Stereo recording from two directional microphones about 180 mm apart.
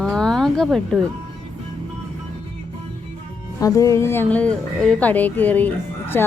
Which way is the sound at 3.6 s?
20° left (ahead or behind).